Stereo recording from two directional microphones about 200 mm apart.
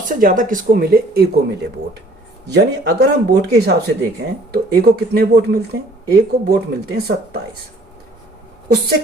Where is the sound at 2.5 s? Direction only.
50° right (ahead or behind).